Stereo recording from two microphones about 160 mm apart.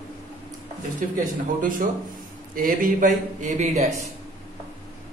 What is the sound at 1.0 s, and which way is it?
A man's voice, 55° right (ahead or behind).